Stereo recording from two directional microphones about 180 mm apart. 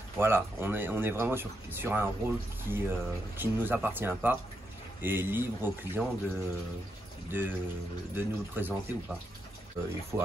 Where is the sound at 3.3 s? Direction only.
10° right (ahead or behind).